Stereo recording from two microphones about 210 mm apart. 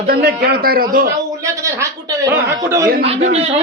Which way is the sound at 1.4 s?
15° right (ahead or behind).